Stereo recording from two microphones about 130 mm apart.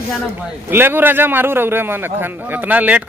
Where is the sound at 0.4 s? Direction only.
15° right (ahead or behind).